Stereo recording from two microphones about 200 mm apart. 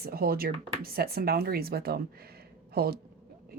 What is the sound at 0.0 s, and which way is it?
Speech, 50° right (ahead or behind).